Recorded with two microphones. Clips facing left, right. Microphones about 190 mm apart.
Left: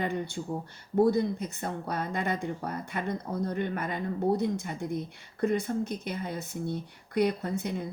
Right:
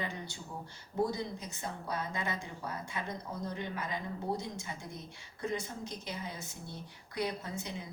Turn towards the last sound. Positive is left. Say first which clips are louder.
# left 9 dB
turn(degrees=55)  # may be behind; listen again after turning